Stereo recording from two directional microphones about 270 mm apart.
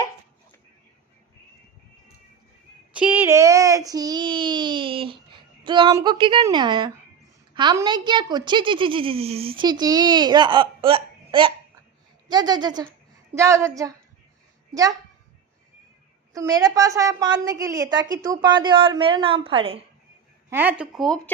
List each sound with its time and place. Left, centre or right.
2.9 s child singing: centre
7.5 s a woman's voice: centre
16.3 s a woman's voice: centre
20.5 s a woman's voice: centre